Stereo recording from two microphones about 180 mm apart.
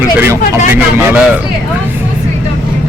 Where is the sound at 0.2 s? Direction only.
10° right (ahead or behind).